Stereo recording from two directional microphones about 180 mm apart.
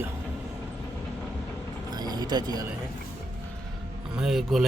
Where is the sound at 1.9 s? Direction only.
20° right (ahead or behind).